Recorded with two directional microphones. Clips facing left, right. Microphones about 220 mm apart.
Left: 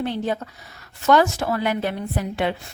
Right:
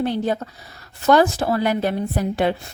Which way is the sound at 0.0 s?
40° right (ahead or behind).